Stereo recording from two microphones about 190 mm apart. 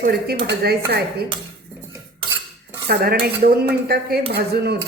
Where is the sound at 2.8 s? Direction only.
50° right (ahead or behind).